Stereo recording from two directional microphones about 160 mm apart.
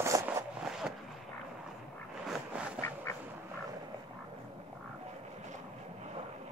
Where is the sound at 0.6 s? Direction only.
5° right (ahead or behind).